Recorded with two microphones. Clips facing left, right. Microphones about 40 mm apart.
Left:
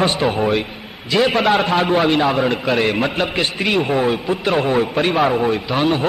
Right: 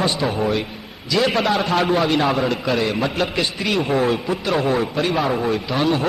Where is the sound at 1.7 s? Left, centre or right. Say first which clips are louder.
Left 2 dB; left.